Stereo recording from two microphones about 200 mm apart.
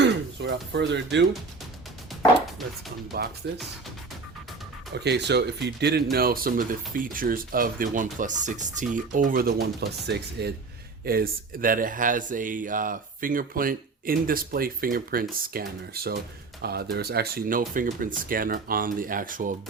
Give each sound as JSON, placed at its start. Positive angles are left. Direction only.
{"t": 0.0, "sound": "a sound", "side_deg": -65}
{"t": 3.1, "sound": "speech", "side_deg": -50}
{"t": 4.9, "sound": "speech", "side_deg": -55}
{"t": 16.6, "sound": "speech", "side_deg": -50}